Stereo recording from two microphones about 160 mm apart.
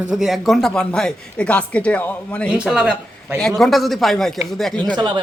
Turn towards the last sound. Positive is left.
turn(degrees=-30)  # may be behind; listen again after turning